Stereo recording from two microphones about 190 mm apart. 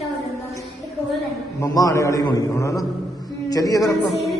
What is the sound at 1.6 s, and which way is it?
A man's voice, 15° left (ahead or behind).